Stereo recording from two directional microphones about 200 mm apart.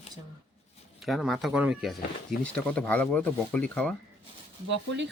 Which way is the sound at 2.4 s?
5° left (ahead or behind).